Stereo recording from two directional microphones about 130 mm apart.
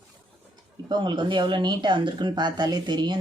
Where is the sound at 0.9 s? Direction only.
35° right (ahead or behind).